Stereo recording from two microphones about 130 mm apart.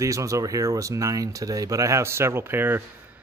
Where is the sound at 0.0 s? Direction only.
25° right (ahead or behind).